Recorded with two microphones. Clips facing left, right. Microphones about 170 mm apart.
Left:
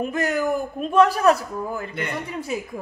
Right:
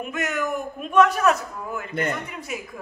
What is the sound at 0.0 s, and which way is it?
A man's voice, 35° left (ahead or behind).